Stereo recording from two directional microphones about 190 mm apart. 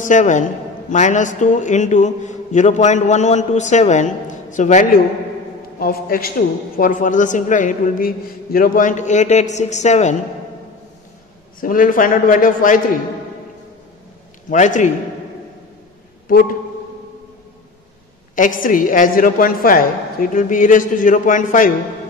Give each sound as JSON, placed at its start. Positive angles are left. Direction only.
{"t": 0.0, "sound": "a man's voice", "side_deg": 40}
{"t": 5.8, "sound": "a woman's voice", "side_deg": 50}
{"t": 11.6, "sound": "a woman's voice", "side_deg": 45}
{"t": 14.5, "sound": "a man's voice", "side_deg": 40}
{"t": 18.3, "sound": "a woman's voice", "side_deg": 45}